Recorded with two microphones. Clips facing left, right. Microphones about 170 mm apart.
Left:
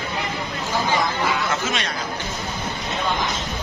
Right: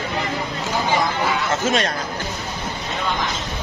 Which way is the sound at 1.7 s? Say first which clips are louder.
Right 6 dB; 45° right (ahead or behind).